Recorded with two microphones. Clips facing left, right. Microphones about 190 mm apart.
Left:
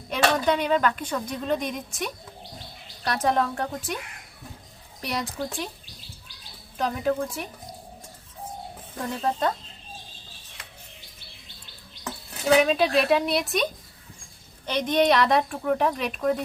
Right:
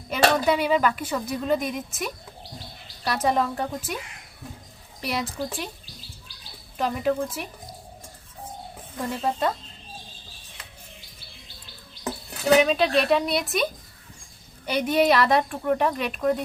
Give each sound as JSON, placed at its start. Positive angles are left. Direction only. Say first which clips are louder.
{"t": 0.1, "sound": "a sound", "louder": "right 2 dB", "side_deg": -5}
{"t": 0.4, "sound": "speech", "louder": "right 1 dB", "side_deg": -5}
{"t": 6.7, "sound": "speech", "louder": "right 1 dB", "side_deg": -5}
{"t": 9.0, "sound": "speech", "louder": "even", "side_deg": -5}
{"t": 12.5, "sound": "speech", "louder": "even", "side_deg": 0}
{"t": 14.7, "sound": "speech", "louder": "right 1 dB", "side_deg": -10}